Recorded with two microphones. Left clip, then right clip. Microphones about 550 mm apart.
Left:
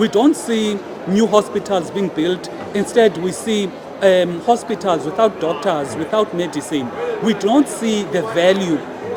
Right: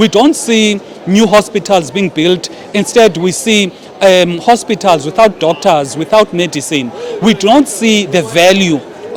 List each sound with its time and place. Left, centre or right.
0.0 s a man's voice: right